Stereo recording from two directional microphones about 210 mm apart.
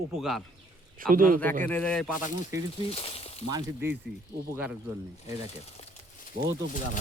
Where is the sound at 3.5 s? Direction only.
15° right (ahead or behind).